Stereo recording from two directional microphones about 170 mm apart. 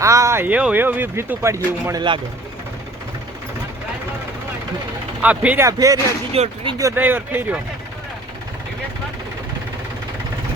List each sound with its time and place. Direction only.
0.0 s speech: 15° right (ahead or behind)
5.2 s speech: 10° right (ahead or behind)
6.3 s speech: 35° right (ahead or behind)
6.7 s speech: 15° right (ahead or behind)